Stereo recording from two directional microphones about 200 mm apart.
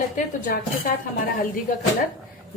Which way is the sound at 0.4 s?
45° left (ahead or behind).